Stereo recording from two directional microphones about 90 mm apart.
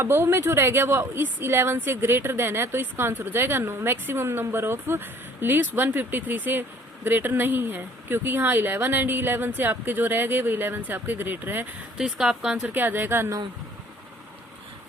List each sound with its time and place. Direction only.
0.0 s speech: 25° right (ahead or behind)
11.9 s speech: 5° right (ahead or behind)
12.7 s speech: 20° right (ahead or behind)